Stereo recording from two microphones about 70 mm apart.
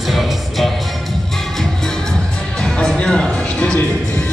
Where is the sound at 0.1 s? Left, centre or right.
Centre.